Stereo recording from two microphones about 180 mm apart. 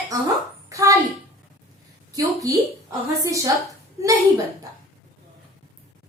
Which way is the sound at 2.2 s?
20° right (ahead or behind).